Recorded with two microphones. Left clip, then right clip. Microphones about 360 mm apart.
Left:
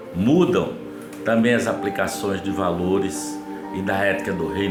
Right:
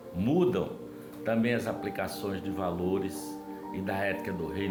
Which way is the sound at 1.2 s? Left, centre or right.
Right.